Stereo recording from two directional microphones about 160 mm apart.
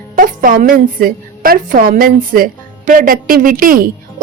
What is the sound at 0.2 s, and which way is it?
A woman's voice, 60° right (ahead or behind).